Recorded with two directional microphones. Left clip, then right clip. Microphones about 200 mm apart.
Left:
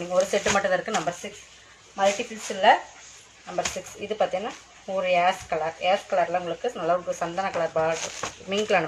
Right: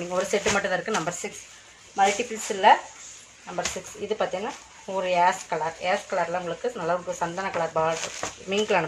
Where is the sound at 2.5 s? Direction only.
20° right (ahead or behind).